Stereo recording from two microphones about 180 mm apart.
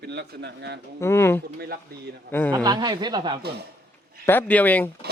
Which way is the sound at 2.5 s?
20° right (ahead or behind).